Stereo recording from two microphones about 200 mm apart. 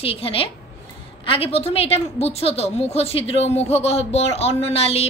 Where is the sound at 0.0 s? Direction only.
30° left (ahead or behind).